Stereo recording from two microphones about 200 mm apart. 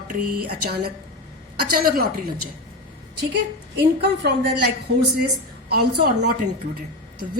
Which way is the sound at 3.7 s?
55° right (ahead or behind).